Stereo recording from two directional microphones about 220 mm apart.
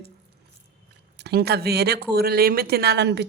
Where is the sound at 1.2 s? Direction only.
45° right (ahead or behind).